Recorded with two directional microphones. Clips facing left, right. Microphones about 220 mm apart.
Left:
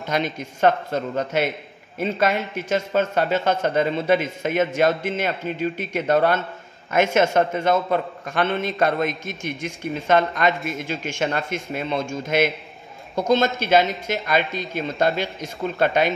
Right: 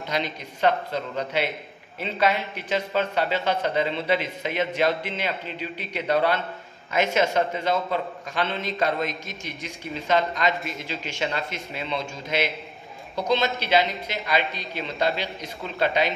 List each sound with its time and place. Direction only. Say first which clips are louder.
0.1 s a man's voice: left 5 dB; 50° left (ahead or behind)